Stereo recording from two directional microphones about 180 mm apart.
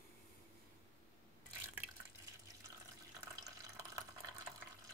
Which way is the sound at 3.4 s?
20° right (ahead or behind).